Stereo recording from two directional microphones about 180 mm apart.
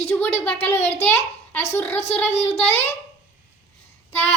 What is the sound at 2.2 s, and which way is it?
Speech, 35° left (ahead or behind).